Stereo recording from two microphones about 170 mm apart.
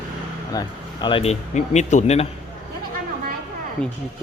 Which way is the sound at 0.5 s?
25° left (ahead or behind).